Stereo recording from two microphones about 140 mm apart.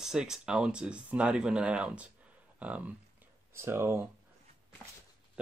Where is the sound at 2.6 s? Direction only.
10° right (ahead or behind).